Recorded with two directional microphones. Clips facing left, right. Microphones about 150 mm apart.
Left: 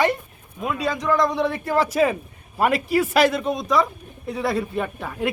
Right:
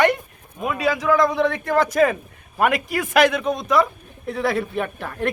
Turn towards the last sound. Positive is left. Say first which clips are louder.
# right 1 dB
turn(degrees=5)  # may be behind; listen again after turning